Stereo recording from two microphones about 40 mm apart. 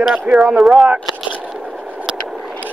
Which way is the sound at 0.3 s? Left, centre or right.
Right.